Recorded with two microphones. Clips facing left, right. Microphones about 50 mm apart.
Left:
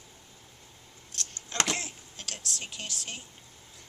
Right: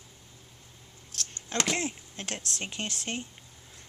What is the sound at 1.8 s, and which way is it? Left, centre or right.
Speech, right.